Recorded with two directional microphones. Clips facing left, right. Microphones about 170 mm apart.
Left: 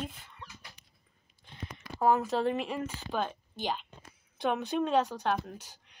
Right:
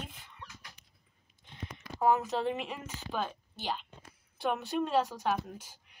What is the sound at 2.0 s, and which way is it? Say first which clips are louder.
Speech: left 2 dB; 15° right (ahead or behind).